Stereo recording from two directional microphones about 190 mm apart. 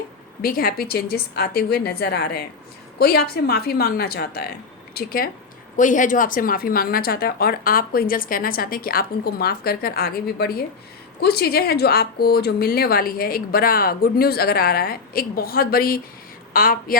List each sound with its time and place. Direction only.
0.4 s a woman's voice: 50° left (ahead or behind)